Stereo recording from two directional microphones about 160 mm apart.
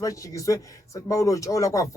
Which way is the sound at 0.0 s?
20° left (ahead or behind).